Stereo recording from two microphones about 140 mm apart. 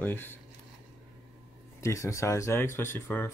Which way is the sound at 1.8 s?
20° left (ahead or behind).